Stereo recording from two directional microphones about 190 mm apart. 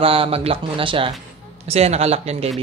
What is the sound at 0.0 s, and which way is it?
Speech, 30° right (ahead or behind).